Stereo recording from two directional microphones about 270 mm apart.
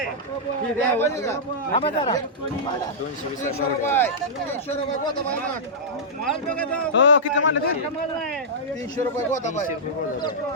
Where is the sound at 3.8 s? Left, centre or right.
Centre.